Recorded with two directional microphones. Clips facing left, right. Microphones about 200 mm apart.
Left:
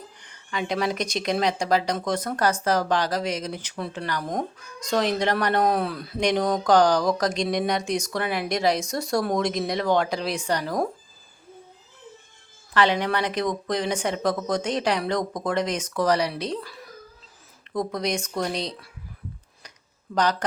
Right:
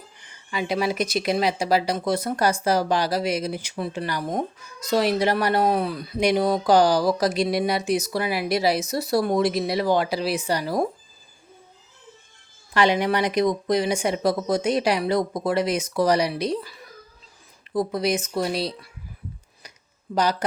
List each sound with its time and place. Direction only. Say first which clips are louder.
0.3 s speech: right 2 dB; 5° right (ahead or behind)
12.7 s speech: right 2 dB; 15° right (ahead or behind)
17.7 s speech: right 3 dB; 5° right (ahead or behind)
20.1 s speech: right 1 dB; centre (ahead or behind)